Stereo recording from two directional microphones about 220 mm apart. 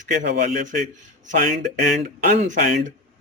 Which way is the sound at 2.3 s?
35° right (ahead or behind).